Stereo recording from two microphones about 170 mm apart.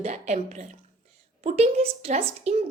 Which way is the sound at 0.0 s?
45° right (ahead or behind).